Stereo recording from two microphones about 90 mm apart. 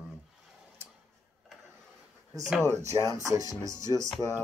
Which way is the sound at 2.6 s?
35° right (ahead or behind).